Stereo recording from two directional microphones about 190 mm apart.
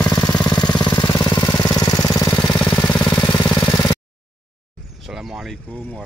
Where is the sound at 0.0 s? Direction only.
20° left (ahead or behind).